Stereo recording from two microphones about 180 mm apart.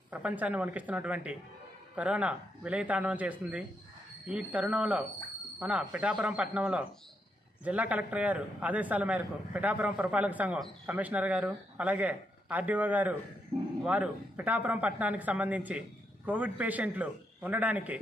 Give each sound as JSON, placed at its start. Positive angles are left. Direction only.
{"t": 0.1, "sound": "a man's voice", "side_deg": -10}
{"t": 13.5, "sound": "speech", "side_deg": -30}
{"t": 13.8, "sound": "a man's voice", "side_deg": -5}